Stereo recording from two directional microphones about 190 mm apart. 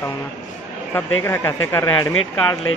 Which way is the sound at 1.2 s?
15° left (ahead or behind).